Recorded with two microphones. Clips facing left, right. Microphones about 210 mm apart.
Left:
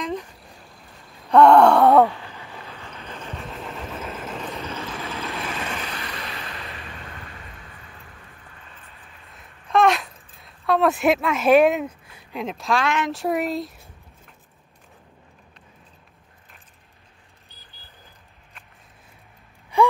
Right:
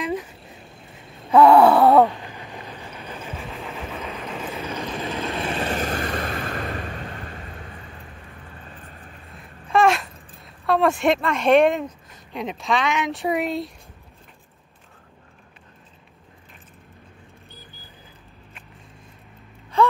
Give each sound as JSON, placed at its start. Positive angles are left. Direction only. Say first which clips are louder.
{"t": 0.0, "sound": "vehicle", "louder": "right 2 dB", "side_deg": -10}
{"t": 0.6, "sound": "vehicle", "louder": "right 3 dB", "side_deg": -25}
{"t": 1.3, "sound": "gasp", "louder": "even", "side_deg": 0}
{"t": 2.0, "sound": "vehicle", "louder": "right 1 dB", "side_deg": -15}
{"t": 4.6, "sound": "vehicle", "louder": "right 3 dB", "side_deg": -15}
{"t": 5.3, "sound": "a sound", "louder": "right 5 dB", "side_deg": -30}
{"t": 8.6, "sound": "vehicle", "louder": "right 6 dB", "side_deg": -45}
{"t": 9.3, "sound": "a sound", "louder": "even", "side_deg": 0}
{"t": 19.7, "sound": "gasp", "louder": "left 1 dB", "side_deg": 15}